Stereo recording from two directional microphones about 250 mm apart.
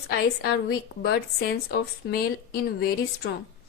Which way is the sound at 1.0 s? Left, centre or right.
Left.